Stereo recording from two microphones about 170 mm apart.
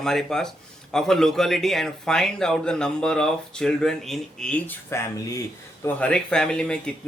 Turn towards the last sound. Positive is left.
turn(degrees=5)  # may be behind; listen again after turning